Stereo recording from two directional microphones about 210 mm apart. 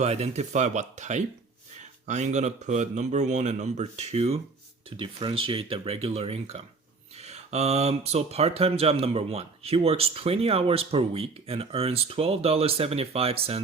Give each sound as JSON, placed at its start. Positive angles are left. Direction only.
{"t": 0.0, "sound": "speech", "side_deg": -30}